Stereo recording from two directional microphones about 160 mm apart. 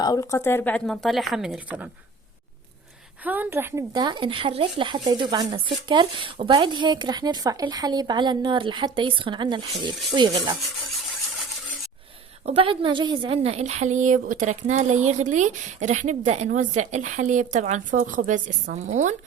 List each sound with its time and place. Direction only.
0.0 s speech: 20° left (ahead or behind); by 1.9 s 10° right (ahead or behind)
3.2 s speech: 10° right (ahead or behind); by 10.6 s 30° right (ahead or behind)
12.5 s a woman's voice: 30° right (ahead or behind); by 19.1 s 50° right (ahead or behind)